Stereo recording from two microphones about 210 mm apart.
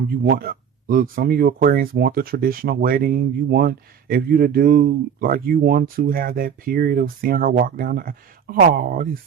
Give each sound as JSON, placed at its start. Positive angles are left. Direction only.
{"t": 0.3, "sound": "speech", "side_deg": -45}